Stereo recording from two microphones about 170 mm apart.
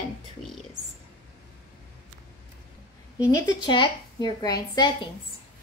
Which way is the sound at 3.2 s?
25° left (ahead or behind).